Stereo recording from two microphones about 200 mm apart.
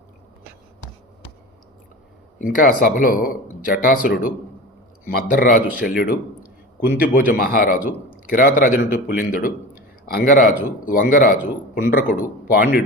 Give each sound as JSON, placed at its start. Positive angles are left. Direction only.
{"t": 2.4, "sound": "speech", "side_deg": 45}